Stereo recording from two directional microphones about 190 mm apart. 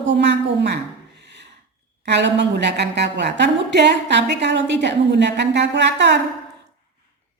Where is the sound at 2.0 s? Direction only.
65° right (ahead or behind).